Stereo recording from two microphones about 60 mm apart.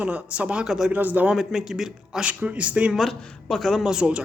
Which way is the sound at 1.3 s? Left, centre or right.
Centre.